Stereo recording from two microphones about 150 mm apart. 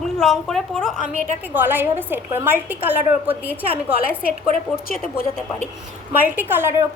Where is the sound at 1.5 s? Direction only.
15° right (ahead or behind).